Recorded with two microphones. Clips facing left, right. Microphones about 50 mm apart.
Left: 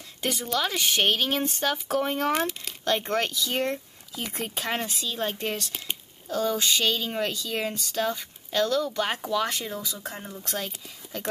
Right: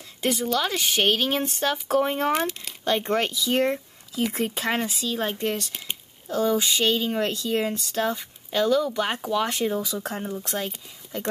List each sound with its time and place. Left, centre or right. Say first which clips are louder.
0.2 s speech: right 3 dB; centre
6.3 s speech: right 3 dB; centre
7.5 s speech: right 4 dB; centre
9.6 s speech: right 8 dB; centre
9.8 s speech: right 5 dB; right
10.5 s speech: right 3 dB; centre